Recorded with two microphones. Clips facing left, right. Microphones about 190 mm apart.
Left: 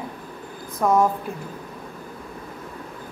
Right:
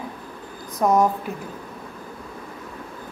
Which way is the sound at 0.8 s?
15° right (ahead or behind).